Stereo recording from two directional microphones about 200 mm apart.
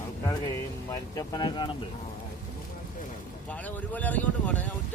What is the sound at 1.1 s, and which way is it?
Speech, 15° left (ahead or behind).